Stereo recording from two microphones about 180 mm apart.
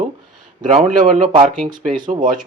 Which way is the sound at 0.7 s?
30° right (ahead or behind).